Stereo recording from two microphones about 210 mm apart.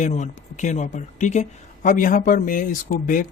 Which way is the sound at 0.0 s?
35° left (ahead or behind).